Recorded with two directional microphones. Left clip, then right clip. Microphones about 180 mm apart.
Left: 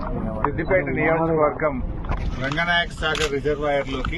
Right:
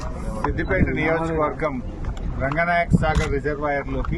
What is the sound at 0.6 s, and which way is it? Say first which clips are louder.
Speech: left 2 dB; 20° right (ahead or behind).